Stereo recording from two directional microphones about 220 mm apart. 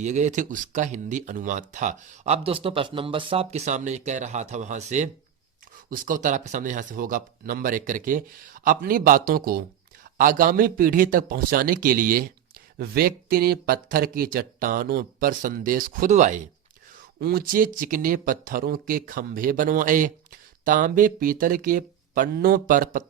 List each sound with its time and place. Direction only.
0.0 s speech: 35° right (ahead or behind)